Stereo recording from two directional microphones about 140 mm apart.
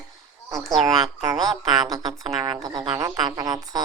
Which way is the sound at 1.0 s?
25° right (ahead or behind).